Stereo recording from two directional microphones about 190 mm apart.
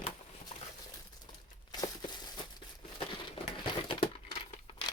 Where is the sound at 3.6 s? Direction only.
25° left (ahead or behind).